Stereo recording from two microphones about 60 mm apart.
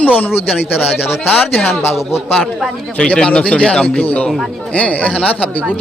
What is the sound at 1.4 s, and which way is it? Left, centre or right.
Speech, centre.